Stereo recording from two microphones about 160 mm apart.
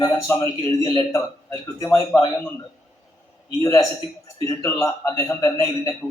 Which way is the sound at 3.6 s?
20° left (ahead or behind).